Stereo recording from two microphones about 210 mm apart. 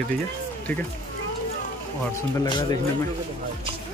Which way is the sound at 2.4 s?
20° left (ahead or behind).